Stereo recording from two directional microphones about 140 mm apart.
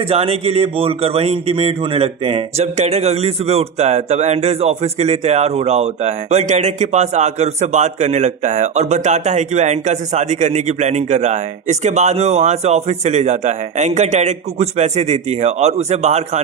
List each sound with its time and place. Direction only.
0.1 s speech: 45° right (ahead or behind)